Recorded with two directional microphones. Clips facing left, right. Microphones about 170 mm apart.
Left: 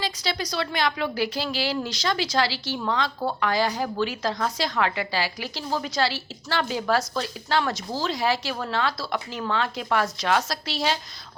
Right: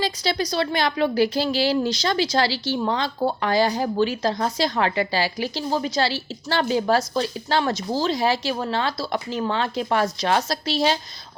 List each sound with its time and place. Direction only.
0.0 s a woman's voice: 35° right (ahead or behind)